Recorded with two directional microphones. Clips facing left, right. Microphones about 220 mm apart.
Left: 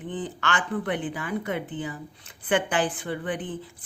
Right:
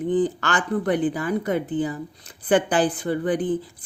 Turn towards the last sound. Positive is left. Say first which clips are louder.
# right 8 dB
turn(degrees=-35)  # may be behind; listen again after turning